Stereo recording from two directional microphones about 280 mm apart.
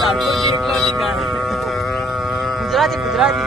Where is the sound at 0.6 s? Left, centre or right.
Centre.